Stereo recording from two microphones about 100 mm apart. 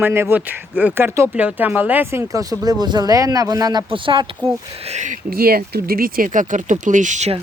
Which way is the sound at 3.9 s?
60° right (ahead or behind).